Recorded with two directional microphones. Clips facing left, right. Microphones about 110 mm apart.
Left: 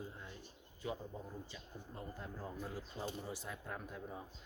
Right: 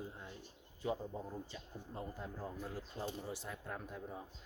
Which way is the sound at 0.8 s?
35° right (ahead or behind).